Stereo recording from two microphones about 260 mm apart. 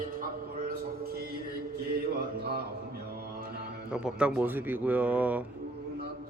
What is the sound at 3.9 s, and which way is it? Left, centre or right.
Speech, centre.